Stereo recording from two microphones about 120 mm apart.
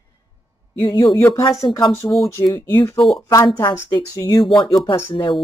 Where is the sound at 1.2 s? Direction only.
25° left (ahead or behind); by 5.4 s 45° left (ahead or behind).